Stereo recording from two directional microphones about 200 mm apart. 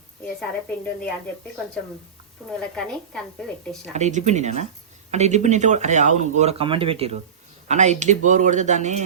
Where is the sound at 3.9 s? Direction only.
35° right (ahead or behind).